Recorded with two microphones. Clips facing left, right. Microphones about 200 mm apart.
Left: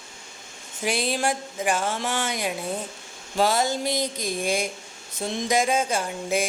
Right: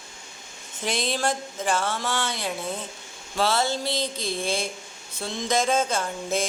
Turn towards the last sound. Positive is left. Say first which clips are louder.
# left 1 dB
turn(degrees=15)  # may be behind; listen again after turning